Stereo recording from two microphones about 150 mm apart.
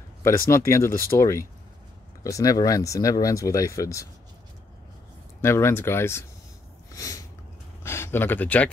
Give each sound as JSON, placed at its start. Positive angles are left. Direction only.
{"t": 0.2, "sound": "speech", "side_deg": 20}
{"t": 5.4, "sound": "speech", "side_deg": 15}
{"t": 6.9, "sound": "a sound", "side_deg": 20}